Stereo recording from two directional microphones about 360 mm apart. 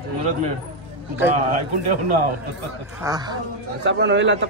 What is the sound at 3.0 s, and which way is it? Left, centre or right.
Speech, centre.